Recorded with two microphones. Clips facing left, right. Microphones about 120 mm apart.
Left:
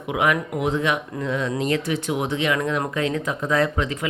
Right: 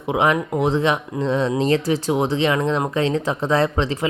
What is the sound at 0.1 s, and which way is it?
Speech, 30° right (ahead or behind).